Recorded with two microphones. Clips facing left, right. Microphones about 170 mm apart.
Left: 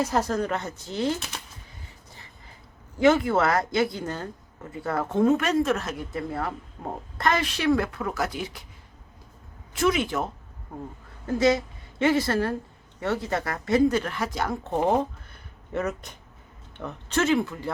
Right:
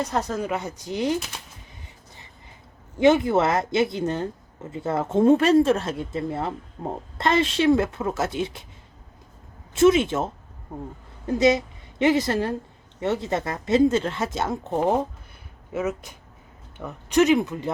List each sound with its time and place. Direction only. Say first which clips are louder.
0.0 s speech: left 1 dB; centre (ahead or behind); by 1.2 s 15° right (ahead or behind)
3.0 s speech: right 2 dB; 20° right (ahead or behind)
9.7 s a woman's voice: right 6 dB; 25° right (ahead or behind)
15.7 s speech: right 2 dB; 5° right (ahead or behind)